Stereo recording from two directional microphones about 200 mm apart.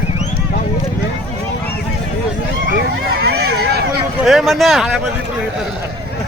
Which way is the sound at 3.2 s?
55° right (ahead or behind).